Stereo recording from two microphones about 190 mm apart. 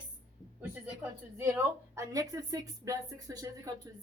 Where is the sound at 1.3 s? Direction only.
10° right (ahead or behind).